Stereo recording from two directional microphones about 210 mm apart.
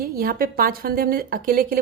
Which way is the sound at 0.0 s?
45° right (ahead or behind).